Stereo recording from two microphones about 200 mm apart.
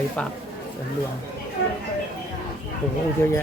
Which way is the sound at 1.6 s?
65° left (ahead or behind).